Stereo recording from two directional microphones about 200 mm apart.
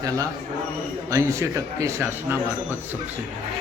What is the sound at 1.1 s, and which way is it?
Speech, 15° right (ahead or behind).